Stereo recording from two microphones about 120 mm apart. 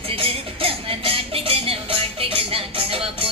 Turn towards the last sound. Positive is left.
turn(degrees=-50)  # may be behind; listen again after turning